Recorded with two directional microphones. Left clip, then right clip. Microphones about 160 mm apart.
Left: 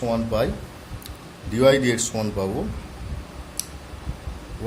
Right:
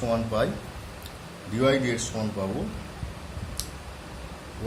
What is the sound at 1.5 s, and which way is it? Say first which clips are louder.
Speech: left 6 dB; 50° left (ahead or behind).